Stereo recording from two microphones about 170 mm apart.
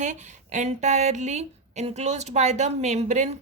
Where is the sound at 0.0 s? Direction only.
45° right (ahead or behind).